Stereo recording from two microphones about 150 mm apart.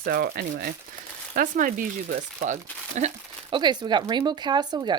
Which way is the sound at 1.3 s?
70° right (ahead or behind).